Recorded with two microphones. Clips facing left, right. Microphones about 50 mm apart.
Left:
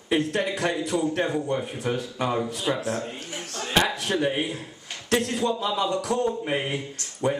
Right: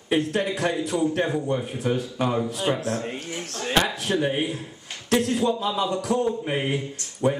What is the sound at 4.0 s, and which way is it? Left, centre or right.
A man's voice, centre.